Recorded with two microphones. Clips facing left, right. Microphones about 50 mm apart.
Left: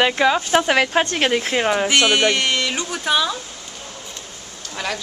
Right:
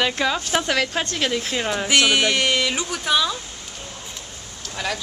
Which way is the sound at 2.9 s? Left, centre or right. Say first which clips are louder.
Left 3 dB; centre.